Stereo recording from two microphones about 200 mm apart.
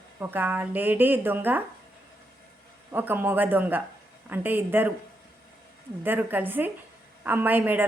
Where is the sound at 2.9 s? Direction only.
10° right (ahead or behind).